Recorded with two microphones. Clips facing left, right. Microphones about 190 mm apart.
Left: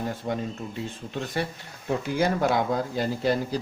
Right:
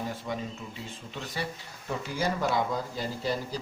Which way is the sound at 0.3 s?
45° left (ahead or behind).